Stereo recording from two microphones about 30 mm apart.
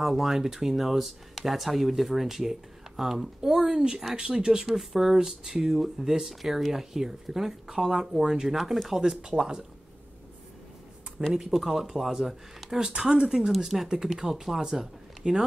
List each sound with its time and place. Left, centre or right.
0.0 s speech: centre
3.3 s speech: centre
8.1 s speech: right
8.5 s speech: centre
9.2 s speech: right
11.2 s speech: right
11.5 s speech: centre
12.9 s speech: right
14.6 s speech: right